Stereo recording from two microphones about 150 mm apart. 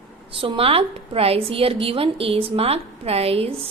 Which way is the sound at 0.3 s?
40° right (ahead or behind).